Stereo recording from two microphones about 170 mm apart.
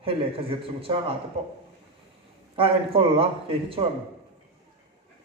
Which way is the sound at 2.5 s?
30° right (ahead or behind).